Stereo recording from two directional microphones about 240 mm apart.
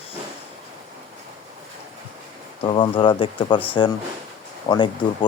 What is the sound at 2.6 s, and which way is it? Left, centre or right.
Speech, left.